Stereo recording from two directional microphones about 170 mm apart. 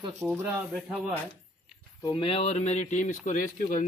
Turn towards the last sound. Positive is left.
turn(degrees=50)  # may be behind; listen again after turning